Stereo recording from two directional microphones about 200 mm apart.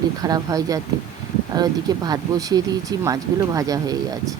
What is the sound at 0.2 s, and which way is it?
Speech, 20° right (ahead or behind).